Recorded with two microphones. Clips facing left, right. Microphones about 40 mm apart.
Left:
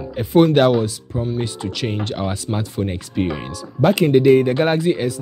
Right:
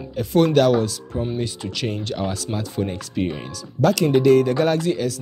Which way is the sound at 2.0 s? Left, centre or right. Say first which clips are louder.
Left 2 dB; centre.